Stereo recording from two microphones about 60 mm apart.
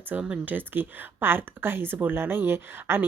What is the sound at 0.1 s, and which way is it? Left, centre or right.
A woman's voice, right.